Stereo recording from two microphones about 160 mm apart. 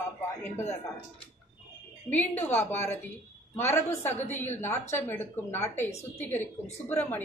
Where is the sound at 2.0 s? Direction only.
10° left (ahead or behind).